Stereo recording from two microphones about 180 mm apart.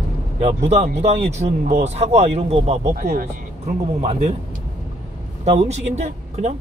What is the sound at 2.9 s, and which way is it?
Speech, 45° right (ahead or behind).